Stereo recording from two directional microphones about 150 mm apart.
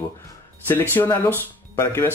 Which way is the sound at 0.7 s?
15° left (ahead or behind).